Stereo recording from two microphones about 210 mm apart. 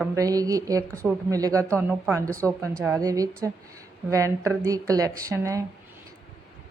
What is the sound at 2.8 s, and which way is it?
Speech, 15° right (ahead or behind).